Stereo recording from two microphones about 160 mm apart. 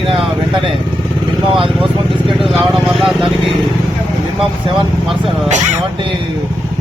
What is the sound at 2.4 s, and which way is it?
Speech, centre (ahead or behind).